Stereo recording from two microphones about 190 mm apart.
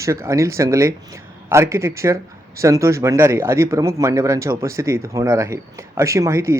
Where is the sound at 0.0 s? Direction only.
15° right (ahead or behind).